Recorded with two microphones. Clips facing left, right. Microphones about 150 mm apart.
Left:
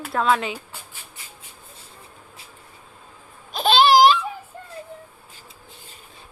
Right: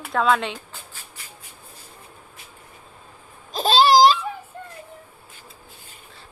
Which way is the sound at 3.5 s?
35° right (ahead or behind).